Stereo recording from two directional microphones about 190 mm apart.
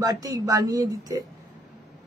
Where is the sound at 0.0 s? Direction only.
20° right (ahead or behind).